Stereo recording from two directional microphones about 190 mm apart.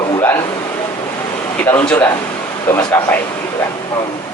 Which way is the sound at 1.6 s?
10° left (ahead or behind).